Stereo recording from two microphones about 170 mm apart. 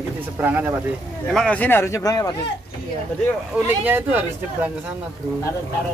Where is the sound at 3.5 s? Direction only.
10° right (ahead or behind).